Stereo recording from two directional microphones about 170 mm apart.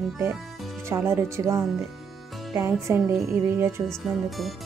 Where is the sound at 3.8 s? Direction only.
Centre (ahead or behind).